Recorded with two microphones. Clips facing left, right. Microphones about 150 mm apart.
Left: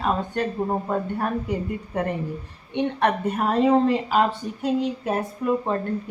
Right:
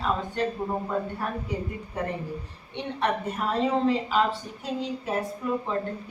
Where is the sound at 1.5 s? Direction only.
60° left (ahead or behind).